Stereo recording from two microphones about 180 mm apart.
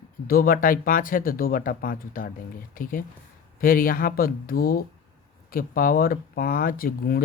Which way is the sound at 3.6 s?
50° left (ahead or behind).